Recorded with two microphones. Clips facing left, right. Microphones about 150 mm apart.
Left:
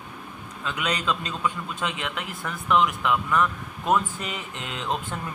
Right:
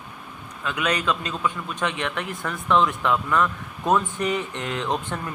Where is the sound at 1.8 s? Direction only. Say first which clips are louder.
Right 4 dB; 15° left (ahead or behind).